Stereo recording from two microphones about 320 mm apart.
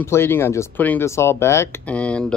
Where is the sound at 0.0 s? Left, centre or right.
Centre.